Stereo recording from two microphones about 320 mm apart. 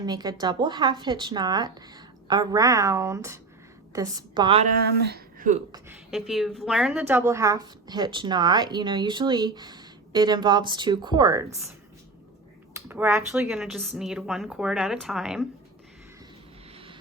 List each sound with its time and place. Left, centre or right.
0.0 s speech: centre
4.9 s speech: right
5.7 s speech: centre
12.7 s speech: centre
16.7 s vehicle: centre